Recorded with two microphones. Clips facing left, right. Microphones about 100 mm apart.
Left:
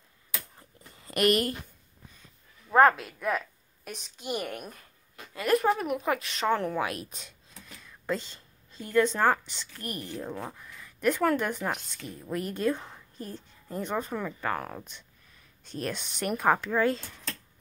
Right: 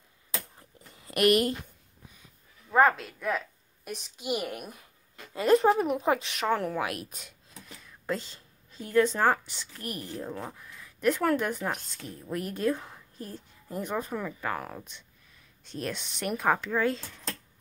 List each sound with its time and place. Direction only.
0.6 s a sound: 5° right (ahead or behind)
2.7 s a woman's voice: centre (ahead or behind)
5.3 s speech: 30° right (ahead or behind)
6.3 s speech: 5° right (ahead or behind)